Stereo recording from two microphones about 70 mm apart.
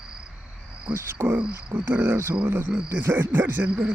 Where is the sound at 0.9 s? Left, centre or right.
Right.